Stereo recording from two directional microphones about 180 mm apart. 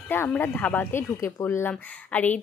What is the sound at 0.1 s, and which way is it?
A woman's voice, 10° left (ahead or behind).